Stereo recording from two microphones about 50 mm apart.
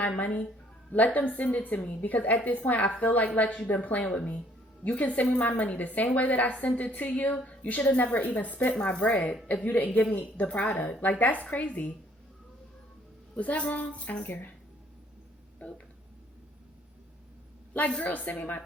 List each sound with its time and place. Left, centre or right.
0.0 s a woman's voice: left
13.3 s a woman's voice: left
15.6 s a woman's voice: left
18.0 s a woman's voice: left